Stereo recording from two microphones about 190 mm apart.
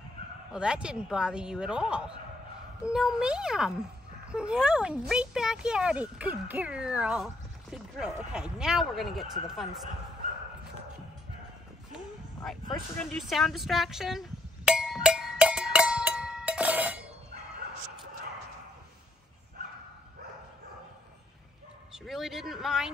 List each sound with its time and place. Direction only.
0.5 s speech: 5° right (ahead or behind)
12.9 s a sound: 5° left (ahead or behind)
21.9 s speech: centre (ahead or behind)